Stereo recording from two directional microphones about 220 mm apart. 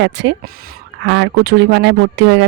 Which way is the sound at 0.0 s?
50° right (ahead or behind).